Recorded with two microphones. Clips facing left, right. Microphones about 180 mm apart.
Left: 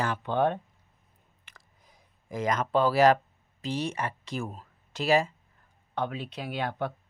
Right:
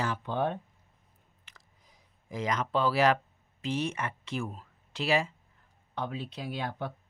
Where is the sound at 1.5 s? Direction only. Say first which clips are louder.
Left 2 dB; 55° left (ahead or behind).